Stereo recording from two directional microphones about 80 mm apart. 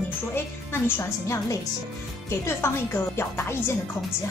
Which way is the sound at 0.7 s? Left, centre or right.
Left.